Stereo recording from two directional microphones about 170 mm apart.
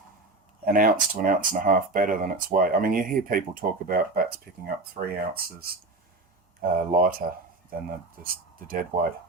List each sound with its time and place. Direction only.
0.6 s speech: 55° right (ahead or behind)